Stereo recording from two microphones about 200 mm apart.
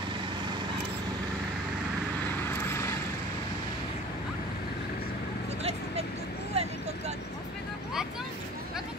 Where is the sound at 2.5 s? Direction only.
15° left (ahead or behind).